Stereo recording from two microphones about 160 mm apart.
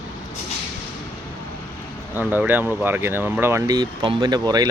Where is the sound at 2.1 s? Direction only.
10° right (ahead or behind).